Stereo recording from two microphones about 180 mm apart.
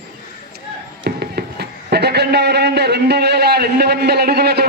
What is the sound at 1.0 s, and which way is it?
A man's voice, 65° right (ahead or behind).